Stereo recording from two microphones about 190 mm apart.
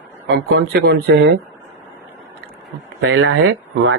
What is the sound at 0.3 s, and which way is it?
Speech, 65° right (ahead or behind).